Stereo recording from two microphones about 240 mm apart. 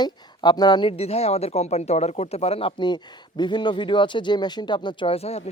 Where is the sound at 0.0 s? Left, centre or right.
Centre.